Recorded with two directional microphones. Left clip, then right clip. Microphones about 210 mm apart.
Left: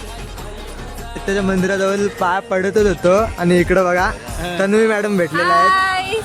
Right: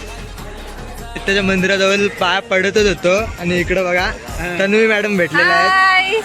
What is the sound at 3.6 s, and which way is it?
A man's voice, 15° left (ahead or behind).